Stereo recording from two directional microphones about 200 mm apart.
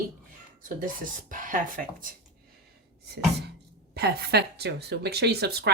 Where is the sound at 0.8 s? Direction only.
40° right (ahead or behind).